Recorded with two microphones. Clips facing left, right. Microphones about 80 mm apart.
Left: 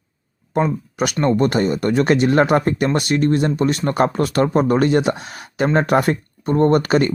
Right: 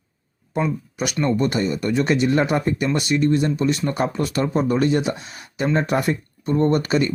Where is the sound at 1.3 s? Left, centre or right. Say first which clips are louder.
Left 4 dB; left.